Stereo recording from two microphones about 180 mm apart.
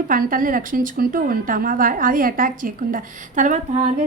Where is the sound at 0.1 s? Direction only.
50° right (ahead or behind).